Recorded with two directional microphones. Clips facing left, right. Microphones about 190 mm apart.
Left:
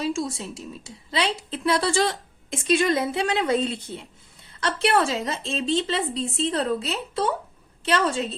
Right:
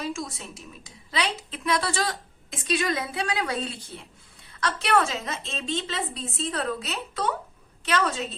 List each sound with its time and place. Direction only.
0.0 s a woman's voice: 25° left (ahead or behind)